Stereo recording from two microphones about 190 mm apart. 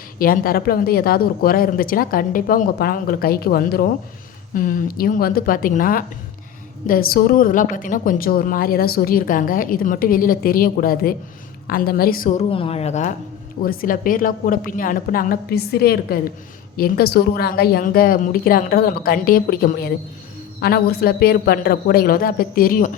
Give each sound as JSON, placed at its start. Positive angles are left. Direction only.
{"t": 0.2, "sound": "a woman's voice", "side_deg": 50}
{"t": 12.4, "sound": "a woman's voice", "side_deg": 30}
{"t": 13.6, "sound": "a woman's voice", "side_deg": 50}